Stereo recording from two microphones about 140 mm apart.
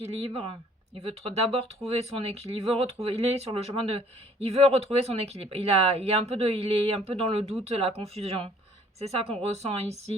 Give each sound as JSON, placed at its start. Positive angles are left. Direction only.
{"t": 0.1, "sound": "speech", "side_deg": -45}